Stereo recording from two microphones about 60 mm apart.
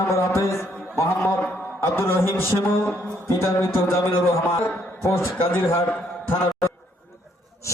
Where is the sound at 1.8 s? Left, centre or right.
Left.